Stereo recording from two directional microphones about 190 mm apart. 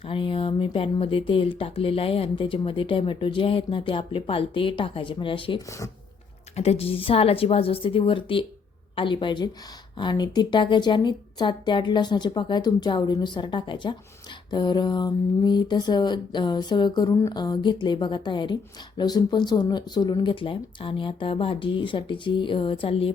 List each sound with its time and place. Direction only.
0.1 s speech: 25° left (ahead or behind)